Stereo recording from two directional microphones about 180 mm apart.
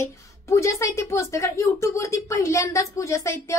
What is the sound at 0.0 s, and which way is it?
A woman's voice, 15° left (ahead or behind).